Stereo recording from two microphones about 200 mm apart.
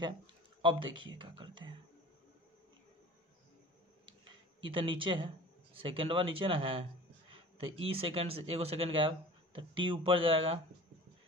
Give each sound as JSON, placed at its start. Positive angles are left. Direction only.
{"t": 0.6, "sound": "speech", "side_deg": -25}
{"t": 4.6, "sound": "speech", "side_deg": -25}